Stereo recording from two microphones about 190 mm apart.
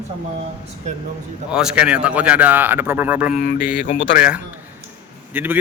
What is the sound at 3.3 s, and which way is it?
Mantra, 45° left (ahead or behind).